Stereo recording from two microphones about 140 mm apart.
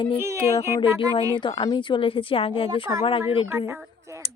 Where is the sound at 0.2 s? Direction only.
20° right (ahead or behind).